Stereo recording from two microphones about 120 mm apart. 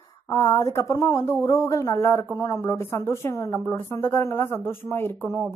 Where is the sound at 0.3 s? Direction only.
30° left (ahead or behind).